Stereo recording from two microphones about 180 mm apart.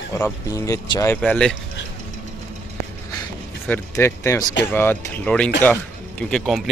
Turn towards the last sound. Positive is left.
turn(degrees=0)  # may be behind; listen again after turning